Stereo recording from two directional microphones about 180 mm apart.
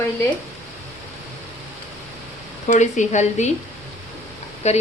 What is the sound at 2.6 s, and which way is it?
Speech, 45° left (ahead or behind).